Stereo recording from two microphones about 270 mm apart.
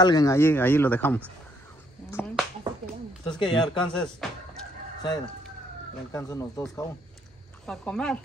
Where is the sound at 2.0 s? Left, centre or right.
Centre.